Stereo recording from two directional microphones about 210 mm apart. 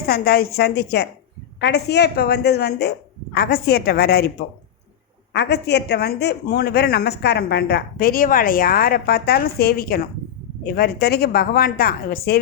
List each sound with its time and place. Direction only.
0.1 s speech: 45° left (ahead or behind)
5.3 s speech: 55° left (ahead or behind)